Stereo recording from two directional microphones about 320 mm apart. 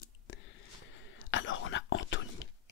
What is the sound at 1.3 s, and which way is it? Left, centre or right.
Whispering, left.